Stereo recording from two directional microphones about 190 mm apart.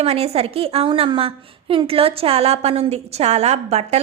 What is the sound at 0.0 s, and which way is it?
A woman's voice, 35° right (ahead or behind).